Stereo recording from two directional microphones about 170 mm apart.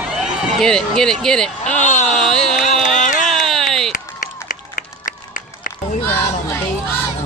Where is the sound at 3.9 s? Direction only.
50° left (ahead or behind).